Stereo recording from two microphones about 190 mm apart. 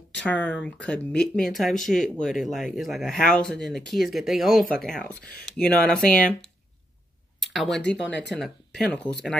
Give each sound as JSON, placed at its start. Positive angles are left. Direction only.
{"t": 0.1, "sound": "speech", "side_deg": 5}
{"t": 7.4, "sound": "speech", "side_deg": 0}
{"t": 8.1, "sound": "speech", "side_deg": 65}
{"t": 8.4, "sound": "speech", "side_deg": 5}